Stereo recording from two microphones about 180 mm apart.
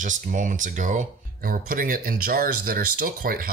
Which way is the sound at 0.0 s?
45° right (ahead or behind).